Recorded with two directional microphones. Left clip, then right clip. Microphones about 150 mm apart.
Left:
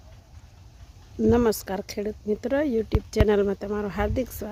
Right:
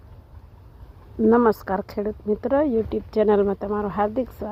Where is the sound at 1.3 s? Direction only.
10° left (ahead or behind).